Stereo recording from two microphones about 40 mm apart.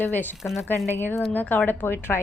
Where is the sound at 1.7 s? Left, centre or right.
Left.